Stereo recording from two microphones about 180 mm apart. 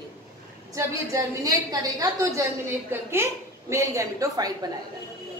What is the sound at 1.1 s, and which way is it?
A woman's voice, 15° right (ahead or behind).